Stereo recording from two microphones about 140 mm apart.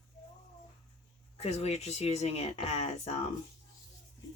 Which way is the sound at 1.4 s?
50° left (ahead or behind).